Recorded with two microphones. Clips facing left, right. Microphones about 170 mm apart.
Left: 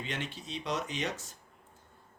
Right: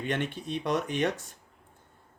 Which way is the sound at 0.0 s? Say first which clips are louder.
Right 8 dB; 55° right (ahead or behind).